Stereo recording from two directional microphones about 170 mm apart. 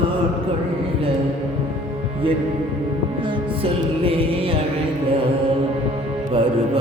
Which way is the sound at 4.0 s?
35° right (ahead or behind).